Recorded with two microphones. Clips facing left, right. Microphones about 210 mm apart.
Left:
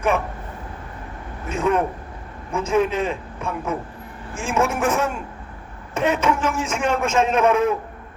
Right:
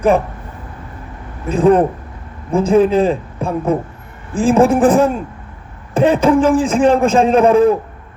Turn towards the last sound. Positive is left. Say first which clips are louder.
# right 8 dB
turn(degrees=-35)  # may be behind; listen again after turning